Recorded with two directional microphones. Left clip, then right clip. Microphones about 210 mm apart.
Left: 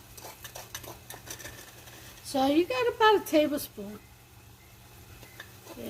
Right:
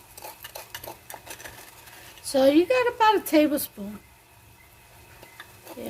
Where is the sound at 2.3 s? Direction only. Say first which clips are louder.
Right 7 dB; 50° right (ahead or behind).